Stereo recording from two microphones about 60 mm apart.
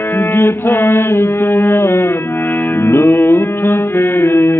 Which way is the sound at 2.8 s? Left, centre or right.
Left.